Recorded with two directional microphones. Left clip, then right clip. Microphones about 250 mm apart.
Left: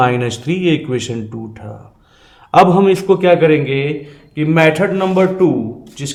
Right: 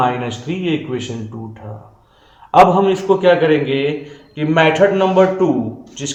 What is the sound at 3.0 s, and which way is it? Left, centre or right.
A man's voice, left.